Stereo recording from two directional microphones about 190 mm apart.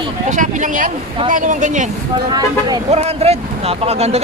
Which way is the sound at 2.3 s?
20° right (ahead or behind).